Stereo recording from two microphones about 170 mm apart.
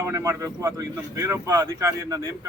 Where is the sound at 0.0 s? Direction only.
15° right (ahead or behind).